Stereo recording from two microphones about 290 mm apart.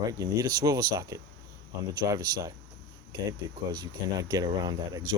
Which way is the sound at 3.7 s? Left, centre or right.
Centre.